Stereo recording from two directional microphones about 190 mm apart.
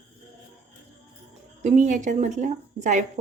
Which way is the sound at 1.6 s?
40° right (ahead or behind).